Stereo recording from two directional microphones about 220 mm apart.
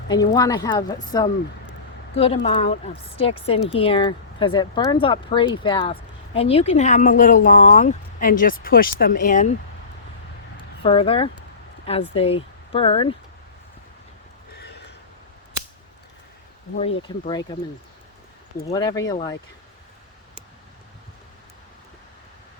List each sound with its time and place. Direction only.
0.1 s a woman's voice: 15° left (ahead or behind)
2.1 s speech: 25° left (ahead or behind)
10.8 s speech: 25° left (ahead or behind)
14.6 s a sound: 50° left (ahead or behind)
16.7 s speech: 25° left (ahead or behind)
18.7 s a woman's voice: 15° left (ahead or behind)